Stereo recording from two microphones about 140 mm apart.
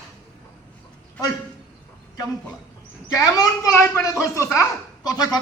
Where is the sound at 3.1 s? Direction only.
25° left (ahead or behind).